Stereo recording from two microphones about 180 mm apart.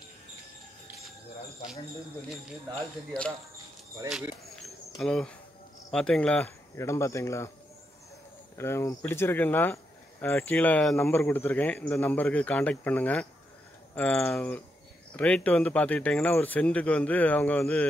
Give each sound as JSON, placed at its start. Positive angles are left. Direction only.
{"t": 2.2, "sound": "speech", "side_deg": 5}
{"t": 4.1, "sound": "insect", "side_deg": 0}
{"t": 5.9, "sound": "speech", "side_deg": 5}
{"t": 8.5, "sound": "speech", "side_deg": 15}